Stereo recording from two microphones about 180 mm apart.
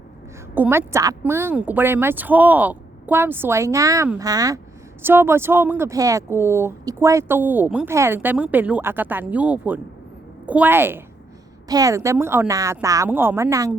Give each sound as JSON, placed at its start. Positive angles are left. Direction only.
{"t": 0.5, "sound": "speech", "side_deg": -10}